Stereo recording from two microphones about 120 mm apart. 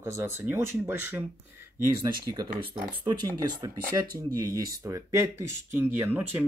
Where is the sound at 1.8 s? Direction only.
30° right (ahead or behind).